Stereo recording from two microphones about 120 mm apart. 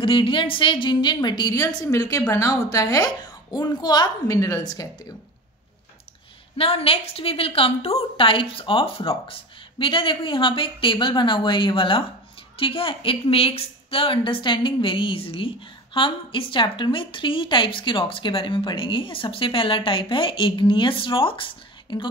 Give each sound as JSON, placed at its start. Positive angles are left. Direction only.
{"t": 0.0, "sound": "a woman's voice", "side_deg": 45}
{"t": 6.5, "sound": "a woman's voice", "side_deg": 55}